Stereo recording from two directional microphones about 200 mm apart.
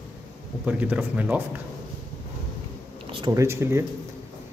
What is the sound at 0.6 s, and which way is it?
Speech, 10° right (ahead or behind).